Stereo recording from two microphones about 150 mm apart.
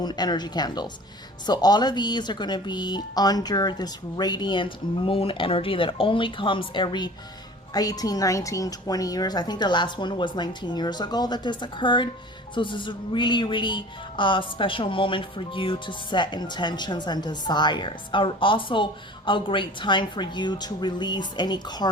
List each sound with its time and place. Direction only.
0.0 s speech: 25° left (ahead or behind)